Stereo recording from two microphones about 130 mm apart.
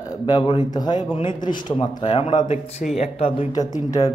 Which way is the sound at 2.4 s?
75° left (ahead or behind).